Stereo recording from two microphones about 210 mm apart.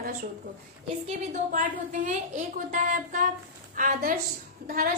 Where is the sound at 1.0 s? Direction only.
40° right (ahead or behind).